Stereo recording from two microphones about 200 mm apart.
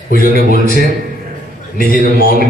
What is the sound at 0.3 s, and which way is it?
Speech, 45° right (ahead or behind).